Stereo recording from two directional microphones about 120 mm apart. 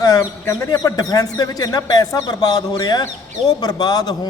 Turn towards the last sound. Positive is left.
turn(degrees=35)  # may be behind; listen again after turning